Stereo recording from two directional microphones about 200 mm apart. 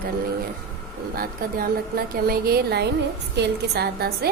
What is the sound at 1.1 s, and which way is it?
A woman's voice, 45° right (ahead or behind).